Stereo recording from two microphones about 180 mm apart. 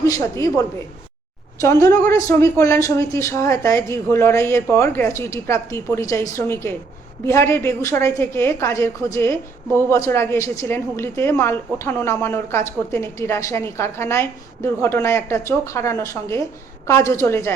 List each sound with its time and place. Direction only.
0.0 s a woman's voice: 15° left (ahead or behind)
1.6 s a woman's voice: 15° left (ahead or behind)